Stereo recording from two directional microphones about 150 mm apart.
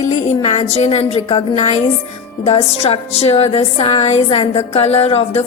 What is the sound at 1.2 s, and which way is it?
A woman's voice, 35° left (ahead or behind).